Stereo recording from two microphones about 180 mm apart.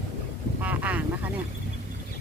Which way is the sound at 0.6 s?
10° right (ahead or behind).